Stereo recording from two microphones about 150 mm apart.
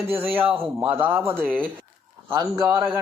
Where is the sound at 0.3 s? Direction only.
10° right (ahead or behind).